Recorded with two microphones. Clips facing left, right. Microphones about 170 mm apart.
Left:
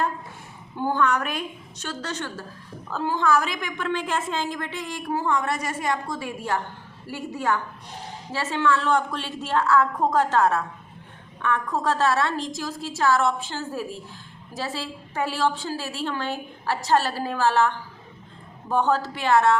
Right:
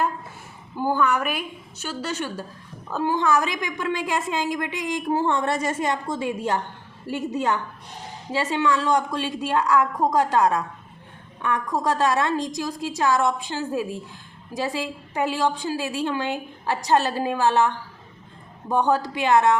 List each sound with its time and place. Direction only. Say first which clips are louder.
0.8 s a woman's voice: right 1 dB; 10° right (ahead or behind)